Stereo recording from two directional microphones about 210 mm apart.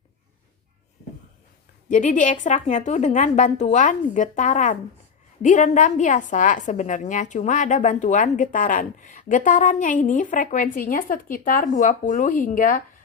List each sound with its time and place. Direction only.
1.9 s a woman's voice: 35° left (ahead or behind)